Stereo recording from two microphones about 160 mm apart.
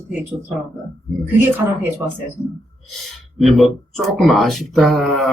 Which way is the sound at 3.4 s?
Centre (ahead or behind).